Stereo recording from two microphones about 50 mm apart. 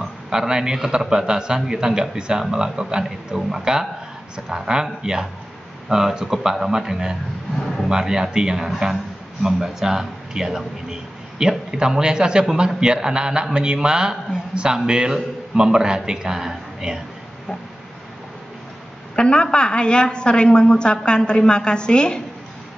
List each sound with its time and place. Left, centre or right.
0.3 s a man's voice: centre
7.5 s speech: centre
7.9 s a man's voice: centre
19.1 s a woman's voice: centre